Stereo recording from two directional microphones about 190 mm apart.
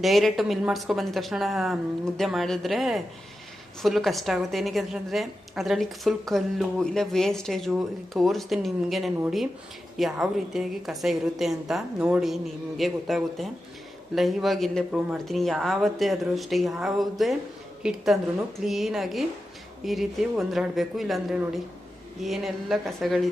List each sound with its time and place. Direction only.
0.0 s a woman's voice: centre (ahead or behind)